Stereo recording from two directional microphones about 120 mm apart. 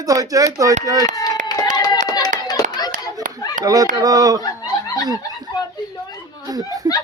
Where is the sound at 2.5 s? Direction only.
35° left (ahead or behind).